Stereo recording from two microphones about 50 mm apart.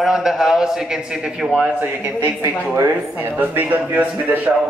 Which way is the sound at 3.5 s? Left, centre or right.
Right.